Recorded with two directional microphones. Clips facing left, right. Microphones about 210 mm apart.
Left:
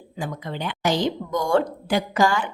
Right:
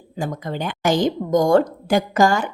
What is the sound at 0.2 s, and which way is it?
A woman's voice, 45° right (ahead or behind).